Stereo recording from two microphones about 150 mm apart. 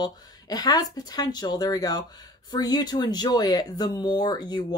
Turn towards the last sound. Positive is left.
turn(degrees=25)  # may be behind; listen again after turning